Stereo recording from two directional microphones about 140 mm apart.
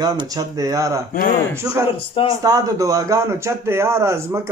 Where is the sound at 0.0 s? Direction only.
25° right (ahead or behind).